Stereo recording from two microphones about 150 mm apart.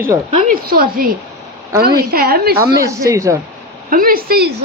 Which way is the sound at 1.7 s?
90° right.